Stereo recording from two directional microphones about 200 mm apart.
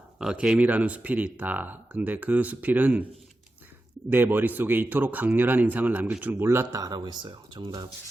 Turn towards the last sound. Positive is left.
turn(degrees=-20)  # may be behind; listen again after turning